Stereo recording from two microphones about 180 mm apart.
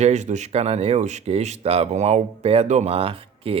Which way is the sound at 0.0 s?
40° right (ahead or behind).